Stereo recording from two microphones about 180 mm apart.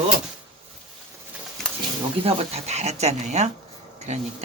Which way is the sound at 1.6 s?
5° left (ahead or behind).